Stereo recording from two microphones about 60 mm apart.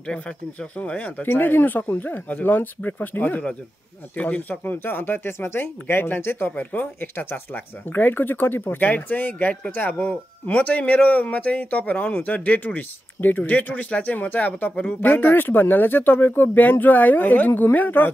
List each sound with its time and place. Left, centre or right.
0.0 s speech: centre